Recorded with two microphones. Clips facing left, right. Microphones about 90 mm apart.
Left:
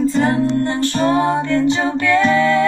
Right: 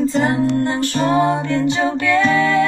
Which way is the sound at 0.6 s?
15° right (ahead or behind).